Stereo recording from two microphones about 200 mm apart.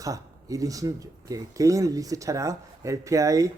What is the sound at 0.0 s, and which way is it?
Speech, 15° right (ahead or behind).